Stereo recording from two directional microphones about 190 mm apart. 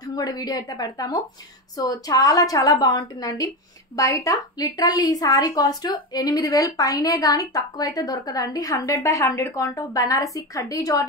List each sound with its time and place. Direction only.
0.0 s a woman's voice: 20° left (ahead or behind)